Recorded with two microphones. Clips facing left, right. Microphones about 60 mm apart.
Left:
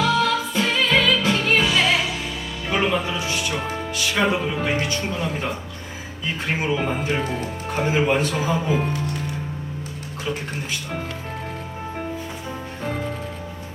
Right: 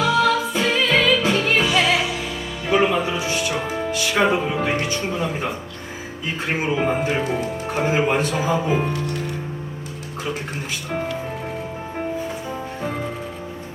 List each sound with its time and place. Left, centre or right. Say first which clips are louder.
0.0 s music: right 2 dB; centre
4.1 s speech: right 2 dB; right
5.1 s speech: right 2 dB; centre
6.7 s speech: right 3 dB; centre